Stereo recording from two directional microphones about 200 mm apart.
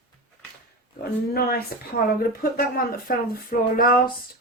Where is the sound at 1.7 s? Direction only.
50° left (ahead or behind).